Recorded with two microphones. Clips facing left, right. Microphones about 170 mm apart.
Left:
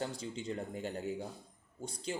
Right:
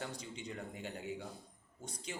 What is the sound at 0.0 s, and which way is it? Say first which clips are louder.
Speech: left 5 dB; 30° left (ahead or behind).